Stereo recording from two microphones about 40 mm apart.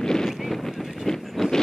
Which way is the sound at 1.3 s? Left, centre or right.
Centre.